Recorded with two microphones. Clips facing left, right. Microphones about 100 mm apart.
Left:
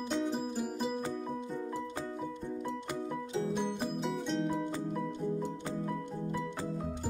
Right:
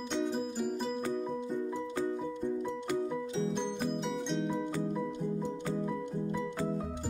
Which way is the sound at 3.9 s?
Centre (ahead or behind).